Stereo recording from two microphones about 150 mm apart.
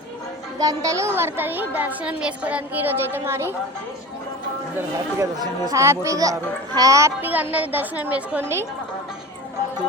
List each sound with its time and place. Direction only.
0.6 s a woman's voice: 25° right (ahead or behind)
4.8 s a woman's voice: 25° right (ahead or behind)